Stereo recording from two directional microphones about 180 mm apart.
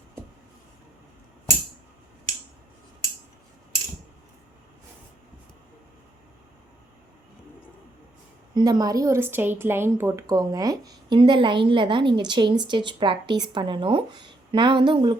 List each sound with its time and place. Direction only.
8.5 s a woman's voice: 20° right (ahead or behind)